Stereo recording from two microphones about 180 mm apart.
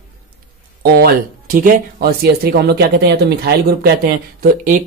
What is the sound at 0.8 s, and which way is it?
Speech, 60° right (ahead or behind).